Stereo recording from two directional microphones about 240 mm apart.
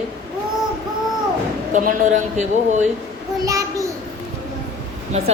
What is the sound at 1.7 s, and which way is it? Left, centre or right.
A man's voice, right.